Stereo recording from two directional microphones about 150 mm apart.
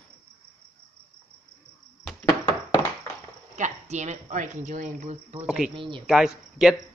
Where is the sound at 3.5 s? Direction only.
50° right (ahead or behind).